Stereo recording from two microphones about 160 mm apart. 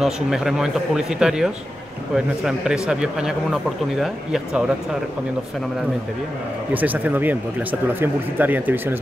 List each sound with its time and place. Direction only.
0.0 s speech: centre (ahead or behind)
6.7 s speech: 10° right (ahead or behind)